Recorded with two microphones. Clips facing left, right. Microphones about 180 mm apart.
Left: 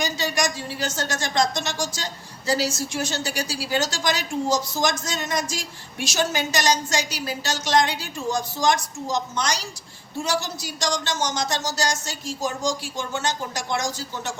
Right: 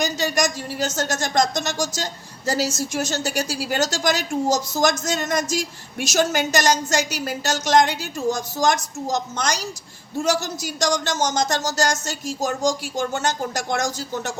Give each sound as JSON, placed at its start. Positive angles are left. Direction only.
{"t": 0.0, "sound": "a woman's voice", "side_deg": -45}